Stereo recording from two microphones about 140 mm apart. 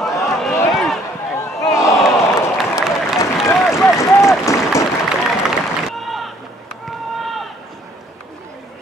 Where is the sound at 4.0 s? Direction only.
20° left (ahead or behind).